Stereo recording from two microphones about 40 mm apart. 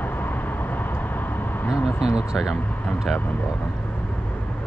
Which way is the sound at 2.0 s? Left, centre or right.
Centre.